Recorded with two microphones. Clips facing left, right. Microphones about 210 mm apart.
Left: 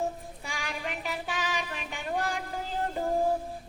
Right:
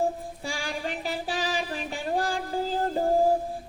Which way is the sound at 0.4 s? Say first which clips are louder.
Right 4 dB; 30° right (ahead or behind).